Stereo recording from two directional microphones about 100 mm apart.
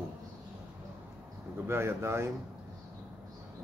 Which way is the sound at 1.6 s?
25° right (ahead or behind).